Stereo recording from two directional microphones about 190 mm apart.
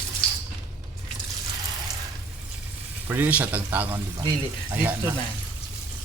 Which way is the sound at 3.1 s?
10° right (ahead or behind).